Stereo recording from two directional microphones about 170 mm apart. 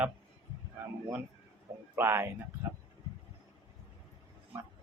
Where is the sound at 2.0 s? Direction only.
15° right (ahead or behind).